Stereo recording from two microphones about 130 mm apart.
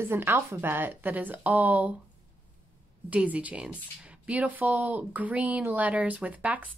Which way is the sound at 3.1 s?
10° right (ahead or behind).